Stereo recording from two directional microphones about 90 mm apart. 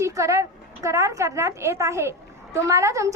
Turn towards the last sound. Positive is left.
turn(degrees=-35)  # may be behind; listen again after turning